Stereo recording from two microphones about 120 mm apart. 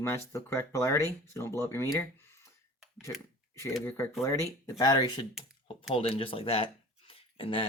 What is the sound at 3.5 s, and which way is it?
Speech, 25° left (ahead or behind).